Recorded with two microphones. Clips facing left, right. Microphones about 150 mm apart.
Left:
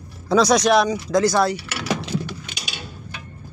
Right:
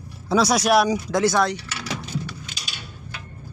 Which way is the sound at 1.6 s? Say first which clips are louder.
Left 6 dB; 70° left (ahead or behind).